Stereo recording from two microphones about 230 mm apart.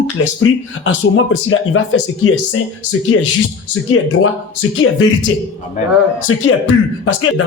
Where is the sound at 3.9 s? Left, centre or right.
Left.